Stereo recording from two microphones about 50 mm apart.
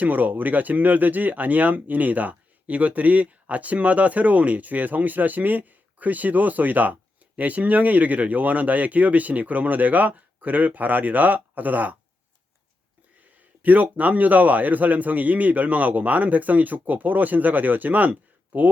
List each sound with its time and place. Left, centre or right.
0.0 s speech: right
13.6 s speech: right